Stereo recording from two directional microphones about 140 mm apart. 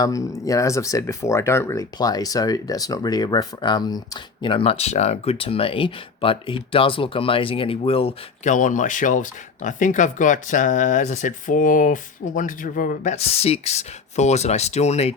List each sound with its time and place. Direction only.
0.0 s speech: 25° left (ahead or behind); by 8.1 s 45° left (ahead or behind)
8.4 s speech: 65° left (ahead or behind)
13.1 s speech: 45° left (ahead or behind)